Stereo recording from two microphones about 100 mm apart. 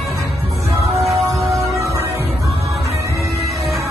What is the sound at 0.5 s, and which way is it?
Music, 30° right (ahead or behind).